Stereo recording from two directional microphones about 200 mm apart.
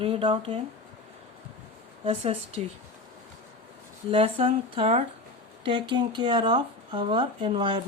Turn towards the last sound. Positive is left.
turn(degrees=-25)  # may be behind; listen again after turning